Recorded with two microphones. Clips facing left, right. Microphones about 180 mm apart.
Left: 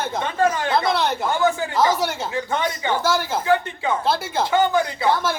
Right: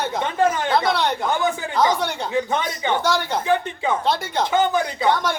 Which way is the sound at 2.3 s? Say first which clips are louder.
Right 1 dB; 20° right (ahead or behind).